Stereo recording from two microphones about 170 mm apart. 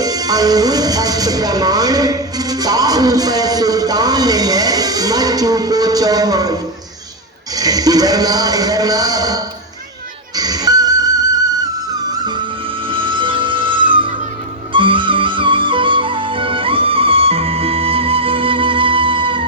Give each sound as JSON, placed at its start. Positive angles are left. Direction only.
{"t": 0.0, "sound": "a man's voice", "side_deg": -20}
{"t": 10.3, "sound": "music", "side_deg": -20}